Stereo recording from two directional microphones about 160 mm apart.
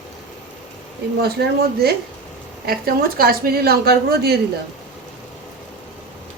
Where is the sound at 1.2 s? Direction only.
75° right (ahead or behind).